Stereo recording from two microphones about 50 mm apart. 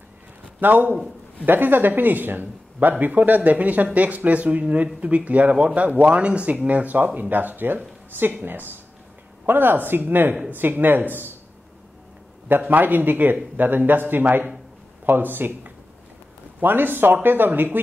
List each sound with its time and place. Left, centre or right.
0.6 s a man's voice: right
12.4 s a man's voice: right